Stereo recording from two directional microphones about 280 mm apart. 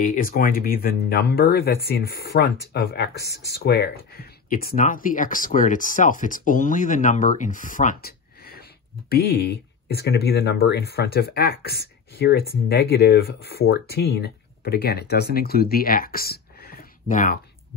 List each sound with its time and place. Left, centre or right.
0.1 s speech: left